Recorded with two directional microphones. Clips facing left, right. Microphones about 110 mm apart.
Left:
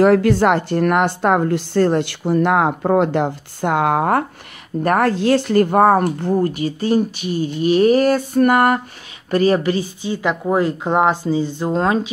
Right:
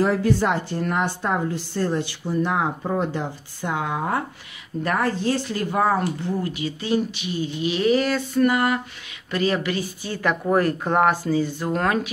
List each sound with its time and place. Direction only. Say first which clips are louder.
0.0 s a woman's voice: left 7 dB; 75° left (ahead or behind); by 8.8 s 55° left (ahead or behind)
9.3 s speech: left 7 dB; 40° left (ahead or behind)
10.0 s a woman's voice: left 2 dB; 20° left (ahead or behind)